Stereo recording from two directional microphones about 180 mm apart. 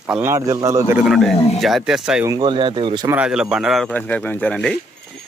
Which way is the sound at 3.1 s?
5° right (ahead or behind).